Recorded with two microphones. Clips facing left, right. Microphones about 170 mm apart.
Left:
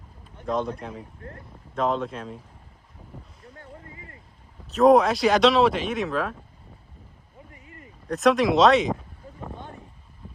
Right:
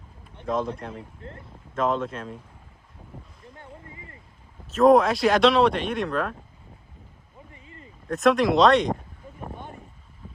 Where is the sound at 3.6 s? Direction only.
25° right (ahead or behind).